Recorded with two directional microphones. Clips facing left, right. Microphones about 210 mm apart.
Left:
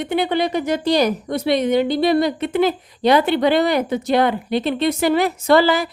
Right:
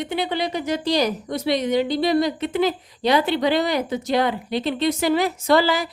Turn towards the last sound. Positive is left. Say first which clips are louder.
# left 4 dB
turn(degrees=55)  # may be behind; listen again after turning